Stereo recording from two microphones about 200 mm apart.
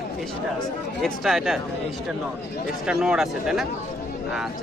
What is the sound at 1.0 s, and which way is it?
Speech, centre (ahead or behind).